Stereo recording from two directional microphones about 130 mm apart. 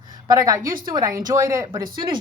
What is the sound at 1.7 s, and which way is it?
Speech, 35° right (ahead or behind).